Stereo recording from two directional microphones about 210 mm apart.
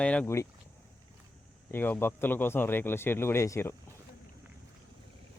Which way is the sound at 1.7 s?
10° left (ahead or behind).